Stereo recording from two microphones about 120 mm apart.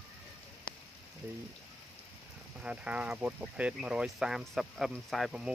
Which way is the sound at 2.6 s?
10° right (ahead or behind).